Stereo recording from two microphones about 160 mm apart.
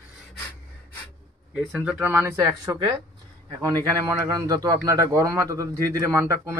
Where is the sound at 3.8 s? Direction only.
20° right (ahead or behind).